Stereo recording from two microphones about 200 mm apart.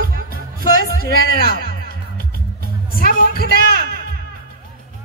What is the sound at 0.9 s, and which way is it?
Speech, 50° left (ahead or behind).